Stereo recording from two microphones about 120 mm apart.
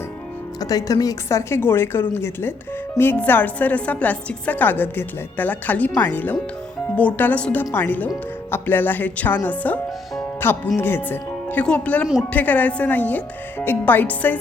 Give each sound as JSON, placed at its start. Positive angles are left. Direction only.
{"t": 0.6, "sound": "a woman's voice", "side_deg": 30}